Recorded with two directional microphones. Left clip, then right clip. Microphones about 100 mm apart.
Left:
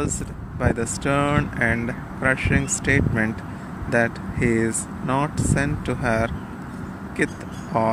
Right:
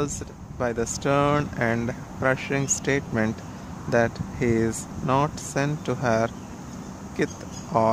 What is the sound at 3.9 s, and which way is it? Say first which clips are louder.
Speech: left 1 dB; 35° right (ahead or behind).